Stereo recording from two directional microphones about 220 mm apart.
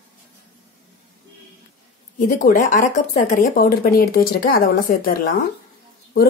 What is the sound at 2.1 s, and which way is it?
Speech, 35° left (ahead or behind).